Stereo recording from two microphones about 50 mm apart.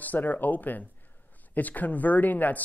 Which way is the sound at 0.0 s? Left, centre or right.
Left.